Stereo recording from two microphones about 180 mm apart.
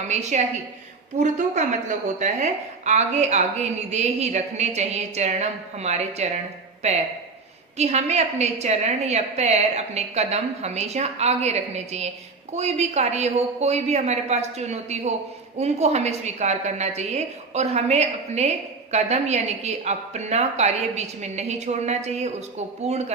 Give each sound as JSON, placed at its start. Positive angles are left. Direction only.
{"t": 0.1, "sound": "a woman's voice", "side_deg": -40}
{"t": 7.8, "sound": "a woman's voice", "side_deg": -35}